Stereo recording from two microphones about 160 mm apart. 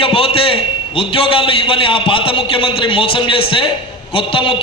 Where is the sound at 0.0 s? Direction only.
35° left (ahead or behind).